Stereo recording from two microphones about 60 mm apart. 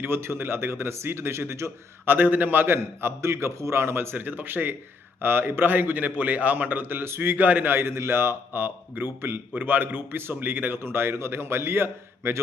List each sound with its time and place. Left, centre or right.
0.0 s speech: right
2.0 s a man's voice: right